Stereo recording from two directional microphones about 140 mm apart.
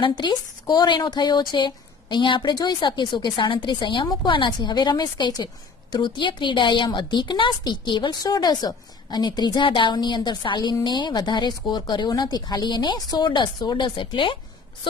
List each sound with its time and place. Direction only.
0.0 s speech: 30° left (ahead or behind)